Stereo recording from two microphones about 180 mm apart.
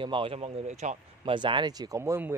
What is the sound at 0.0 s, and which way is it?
Speech, 30° right (ahead or behind).